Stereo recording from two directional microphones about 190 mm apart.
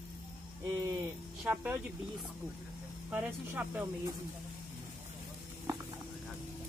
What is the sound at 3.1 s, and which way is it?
Speech, 10° right (ahead or behind).